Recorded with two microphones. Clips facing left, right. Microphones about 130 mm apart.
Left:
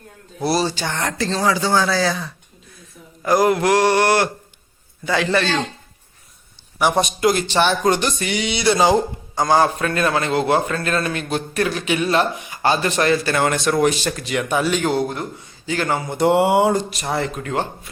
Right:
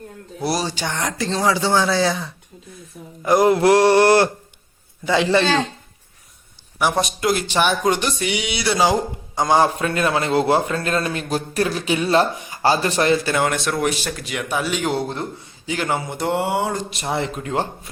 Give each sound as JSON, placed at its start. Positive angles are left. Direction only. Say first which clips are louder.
{"t": 0.4, "sound": "speech", "louder": "left 3 dB", "side_deg": -15}
{"t": 3.2, "sound": "a man's voice", "louder": "right 2 dB", "side_deg": -25}
{"t": 7.0, "sound": "speech", "louder": "left 3 dB", "side_deg": 0}
{"t": 9.4, "sound": "a man's voice", "louder": "even", "side_deg": -25}
{"t": 13.4, "sound": "speech", "louder": "left 3 dB", "side_deg": 0}
{"t": 15.0, "sound": "speech", "louder": "left 1 dB", "side_deg": 5}
{"t": 15.6, "sound": "speech", "louder": "left 1 dB", "side_deg": -15}
{"t": 16.2, "sound": "a sound", "louder": "left 8 dB", "side_deg": 10}
{"t": 16.7, "sound": "speech", "louder": "left 3 dB", "side_deg": 0}
{"t": 17.2, "sound": "a man's voice", "louder": "even", "side_deg": -25}